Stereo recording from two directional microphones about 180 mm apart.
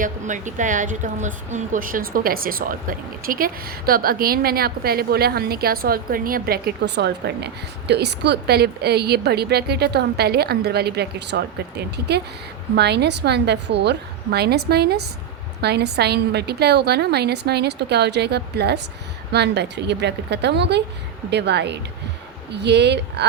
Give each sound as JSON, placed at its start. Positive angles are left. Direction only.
{"t": 0.0, "sound": "a woman's voice", "side_deg": -45}
{"t": 12.7, "sound": "a woman's voice", "side_deg": -65}